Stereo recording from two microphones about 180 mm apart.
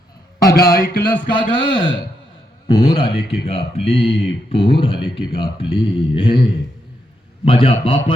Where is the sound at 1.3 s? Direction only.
25° left (ahead or behind).